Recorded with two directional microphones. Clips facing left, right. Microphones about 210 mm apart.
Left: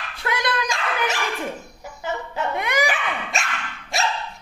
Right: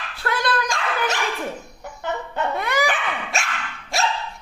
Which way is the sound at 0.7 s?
Centre (ahead or behind).